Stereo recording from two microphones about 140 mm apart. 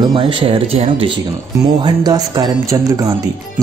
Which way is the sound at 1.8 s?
30° right (ahead or behind).